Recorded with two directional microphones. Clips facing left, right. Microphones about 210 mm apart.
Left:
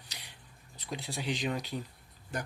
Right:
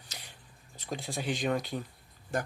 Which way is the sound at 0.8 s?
45° right (ahead or behind).